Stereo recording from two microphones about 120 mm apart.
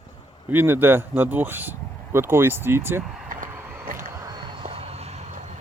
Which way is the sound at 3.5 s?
15° right (ahead or behind).